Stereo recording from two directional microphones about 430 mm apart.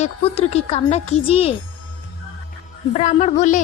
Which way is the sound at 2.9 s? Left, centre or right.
Centre.